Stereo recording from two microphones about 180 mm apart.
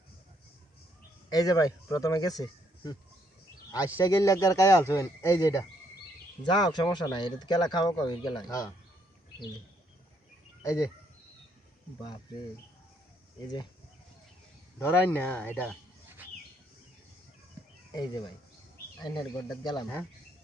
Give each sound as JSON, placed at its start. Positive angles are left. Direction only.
{"t": 1.3, "sound": "speech", "side_deg": 20}
{"t": 10.6, "sound": "speech", "side_deg": 15}
{"t": 11.9, "sound": "speech", "side_deg": 25}
{"t": 14.8, "sound": "speech", "side_deg": 10}
{"t": 17.9, "sound": "speech", "side_deg": 25}